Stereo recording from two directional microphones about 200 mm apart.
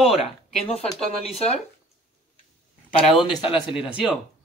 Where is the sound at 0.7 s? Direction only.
30° left (ahead or behind).